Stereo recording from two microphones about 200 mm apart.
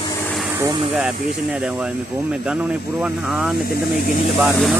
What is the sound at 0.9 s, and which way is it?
Speech, 5° right (ahead or behind).